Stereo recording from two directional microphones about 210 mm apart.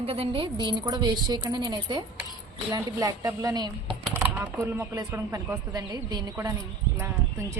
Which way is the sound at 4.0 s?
10° right (ahead or behind).